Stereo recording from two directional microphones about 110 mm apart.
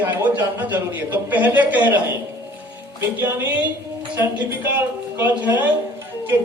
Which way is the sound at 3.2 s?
15° right (ahead or behind).